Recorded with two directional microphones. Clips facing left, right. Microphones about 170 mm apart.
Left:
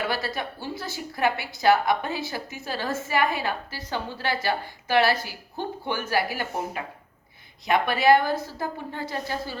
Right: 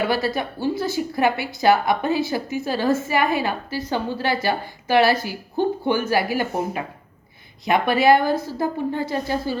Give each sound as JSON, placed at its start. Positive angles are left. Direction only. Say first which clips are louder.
{"t": 0.1, "sound": "a woman's voice", "louder": "right 7 dB", "side_deg": -10}